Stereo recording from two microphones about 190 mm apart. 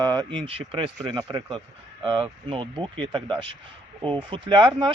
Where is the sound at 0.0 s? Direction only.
20° right (ahead or behind).